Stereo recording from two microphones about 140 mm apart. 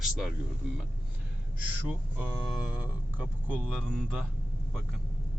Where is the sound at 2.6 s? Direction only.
10° right (ahead or behind).